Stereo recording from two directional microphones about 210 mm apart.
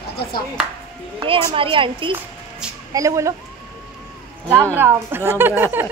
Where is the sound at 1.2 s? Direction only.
25° right (ahead or behind).